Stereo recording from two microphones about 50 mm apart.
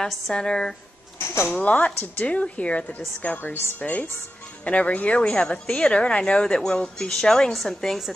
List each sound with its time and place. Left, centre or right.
0.0 s a woman's voice: centre
1.6 s a woman's voice: left; by 8.1 s centre